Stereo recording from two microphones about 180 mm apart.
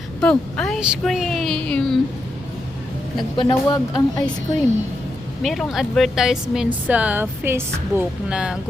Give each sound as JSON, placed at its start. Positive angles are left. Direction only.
{"t": 0.2, "sound": "a woman's voice", "side_deg": 5}
{"t": 3.2, "sound": "speech", "side_deg": 25}
{"t": 5.4, "sound": "a woman's voice", "side_deg": 0}